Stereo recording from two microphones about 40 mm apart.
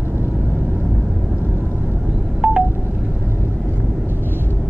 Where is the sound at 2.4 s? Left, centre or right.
Right.